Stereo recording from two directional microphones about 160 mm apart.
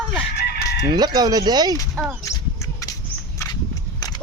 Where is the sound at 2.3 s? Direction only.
20° left (ahead or behind).